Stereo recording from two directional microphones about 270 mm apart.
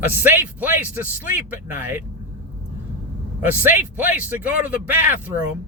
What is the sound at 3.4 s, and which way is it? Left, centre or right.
Speech, centre.